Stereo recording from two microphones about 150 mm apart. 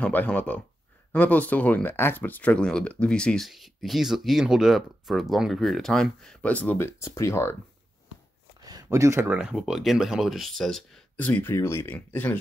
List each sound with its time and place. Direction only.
0.0 s speech: 10° left (ahead or behind)
8.5 s a sound: 25° right (ahead or behind)
8.8 s speech: 20° right (ahead or behind); by 12.4 s 10° left (ahead or behind)